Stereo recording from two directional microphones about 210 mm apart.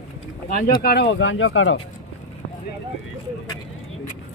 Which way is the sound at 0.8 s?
50° left (ahead or behind).